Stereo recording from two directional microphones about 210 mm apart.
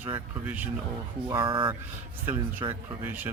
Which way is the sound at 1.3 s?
20° right (ahead or behind).